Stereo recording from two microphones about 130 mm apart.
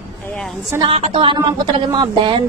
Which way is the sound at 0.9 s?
50° right (ahead or behind).